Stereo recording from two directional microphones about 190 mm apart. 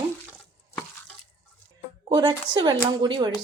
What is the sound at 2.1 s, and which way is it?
A woman's voice, 25° right (ahead or behind).